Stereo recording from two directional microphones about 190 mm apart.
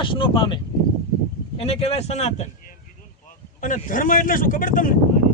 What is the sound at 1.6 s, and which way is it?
Speech, 30° left (ahead or behind).